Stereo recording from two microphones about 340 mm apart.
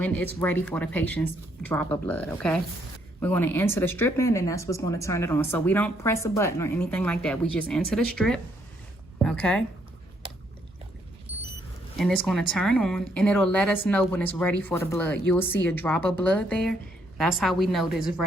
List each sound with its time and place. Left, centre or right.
0.0 s a woman's voice: centre
11.3 s a sound: centre
11.9 s speech: centre